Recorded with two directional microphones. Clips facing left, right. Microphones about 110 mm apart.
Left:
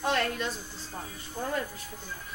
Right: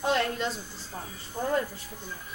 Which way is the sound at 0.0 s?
25° right (ahead or behind).